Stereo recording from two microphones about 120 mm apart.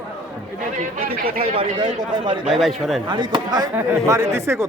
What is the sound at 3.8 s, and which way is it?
Speech, 25° right (ahead or behind).